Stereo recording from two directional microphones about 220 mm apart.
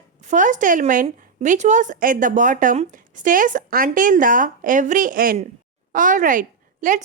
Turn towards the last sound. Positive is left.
turn(degrees=-35)  # may be behind; listen again after turning